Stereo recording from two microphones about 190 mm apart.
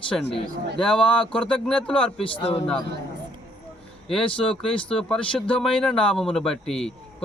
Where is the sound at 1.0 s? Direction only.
25° left (ahead or behind).